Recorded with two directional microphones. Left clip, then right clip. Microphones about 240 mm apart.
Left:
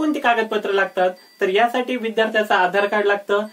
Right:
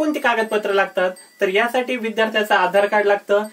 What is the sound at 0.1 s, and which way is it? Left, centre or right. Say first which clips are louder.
Speech: even; centre.